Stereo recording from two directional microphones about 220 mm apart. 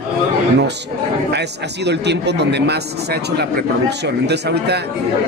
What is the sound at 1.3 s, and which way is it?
A man's voice, 50° right (ahead or behind).